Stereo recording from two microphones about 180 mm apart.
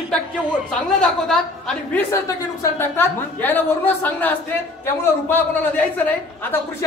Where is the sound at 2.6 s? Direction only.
10° left (ahead or behind).